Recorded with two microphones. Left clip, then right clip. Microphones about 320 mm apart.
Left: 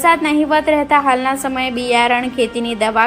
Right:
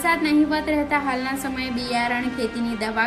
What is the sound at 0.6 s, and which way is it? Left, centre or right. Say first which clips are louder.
A woman's voice: left 9 dB; left.